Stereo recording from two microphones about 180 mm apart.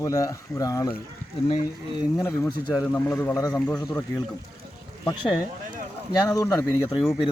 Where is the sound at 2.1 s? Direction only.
15° left (ahead or behind).